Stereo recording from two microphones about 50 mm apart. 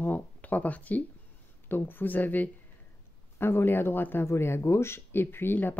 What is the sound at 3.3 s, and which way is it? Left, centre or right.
Speech, left.